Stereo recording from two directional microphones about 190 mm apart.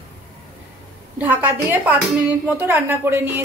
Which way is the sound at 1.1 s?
10° right (ahead or behind).